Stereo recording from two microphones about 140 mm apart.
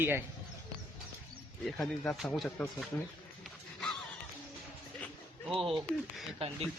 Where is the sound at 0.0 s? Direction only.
15° right (ahead or behind).